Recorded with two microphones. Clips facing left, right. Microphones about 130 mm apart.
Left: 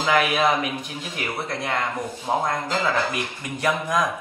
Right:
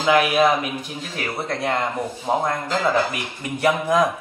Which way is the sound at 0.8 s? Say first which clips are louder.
Right 2 dB; 40° right (ahead or behind).